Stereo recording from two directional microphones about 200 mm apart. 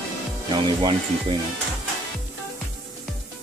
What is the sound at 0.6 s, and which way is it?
Speech, 20° right (ahead or behind).